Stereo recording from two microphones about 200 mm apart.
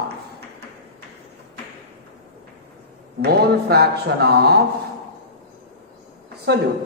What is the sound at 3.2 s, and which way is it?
Speech, 55° right (ahead or behind).